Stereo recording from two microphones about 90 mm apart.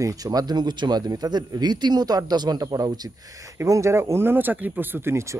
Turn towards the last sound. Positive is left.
turn(degrees=-30)  # may be behind; listen again after turning